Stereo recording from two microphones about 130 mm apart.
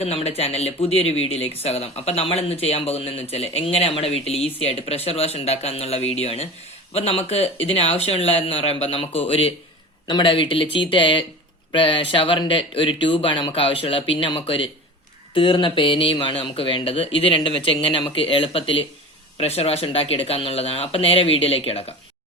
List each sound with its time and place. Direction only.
0.0 s speech: 50° left (ahead or behind)
10.1 s speech: 40° left (ahead or behind)